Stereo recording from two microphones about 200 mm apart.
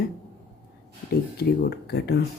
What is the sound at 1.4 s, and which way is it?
Speech, 50° left (ahead or behind).